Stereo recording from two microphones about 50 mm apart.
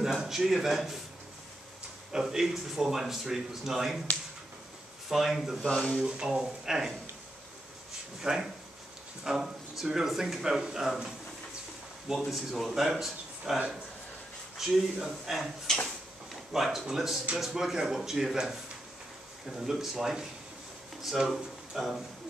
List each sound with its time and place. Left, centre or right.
0.0 s speech: centre
2.1 s speech: centre
5.1 s speech: centre
5.6 s speech: centre
5.9 s speech: centre
8.2 s speech: centre
12.3 s speech: centre
14.6 s speech: centre
15.3 s speech: centre
16.5 s speech: centre